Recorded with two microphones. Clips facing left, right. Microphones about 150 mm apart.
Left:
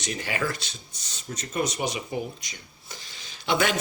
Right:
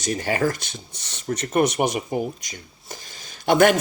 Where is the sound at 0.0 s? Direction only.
45° right (ahead or behind).